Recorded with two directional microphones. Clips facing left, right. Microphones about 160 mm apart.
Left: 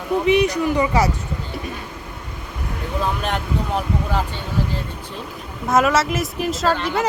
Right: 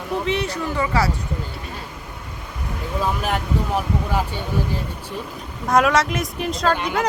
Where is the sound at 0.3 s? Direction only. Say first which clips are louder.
Left 11 dB; 15° left (ahead or behind).